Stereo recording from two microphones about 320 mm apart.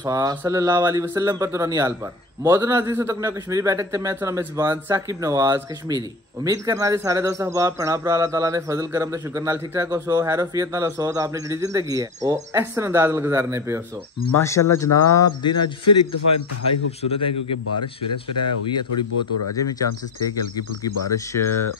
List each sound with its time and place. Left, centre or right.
0.0 s a man's voice: centre
14.3 s speech: centre
15.5 s speech: left
21.3 s speech: centre